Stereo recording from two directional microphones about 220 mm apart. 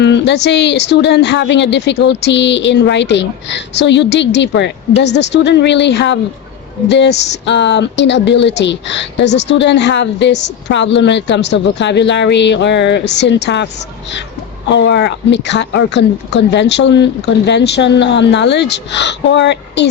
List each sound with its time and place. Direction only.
0.0 s speech: 50° left (ahead or behind)
14.7 s speech: 55° left (ahead or behind)